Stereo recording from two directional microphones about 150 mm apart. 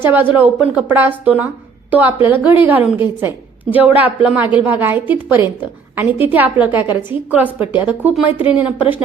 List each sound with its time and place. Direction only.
0.0 s a woman's voice: 15° right (ahead or behind)